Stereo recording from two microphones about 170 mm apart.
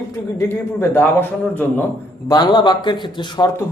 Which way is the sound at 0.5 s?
15° left (ahead or behind).